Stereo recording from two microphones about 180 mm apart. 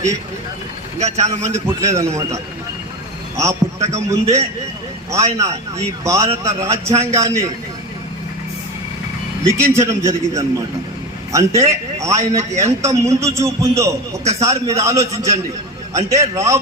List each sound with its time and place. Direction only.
0.9 s a man's voice: 40° right (ahead or behind)
1.5 s a man's voice: 15° right (ahead or behind)
3.3 s a man's voice: 15° right (ahead or behind)
9.7 s a man's voice: 15° right (ahead or behind)